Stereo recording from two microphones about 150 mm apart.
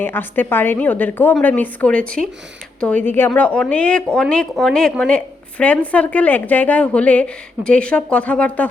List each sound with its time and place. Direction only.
0.0 s a woman's voice: 15° left (ahead or behind)